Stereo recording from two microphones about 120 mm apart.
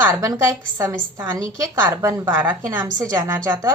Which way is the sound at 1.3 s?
30° right (ahead or behind).